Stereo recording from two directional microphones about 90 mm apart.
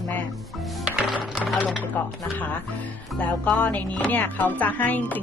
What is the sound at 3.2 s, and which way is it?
Speech, 15° left (ahead or behind).